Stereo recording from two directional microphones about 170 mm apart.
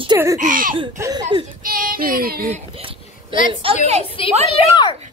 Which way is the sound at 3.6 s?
30° right (ahead or behind).